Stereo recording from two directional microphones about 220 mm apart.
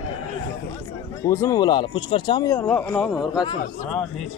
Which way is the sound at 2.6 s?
5° left (ahead or behind).